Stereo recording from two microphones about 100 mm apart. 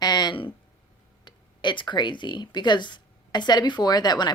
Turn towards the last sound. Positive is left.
turn(degrees=45)  # may be behind; listen again after turning